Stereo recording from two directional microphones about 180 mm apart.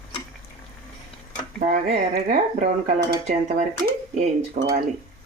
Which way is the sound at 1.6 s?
45° right (ahead or behind).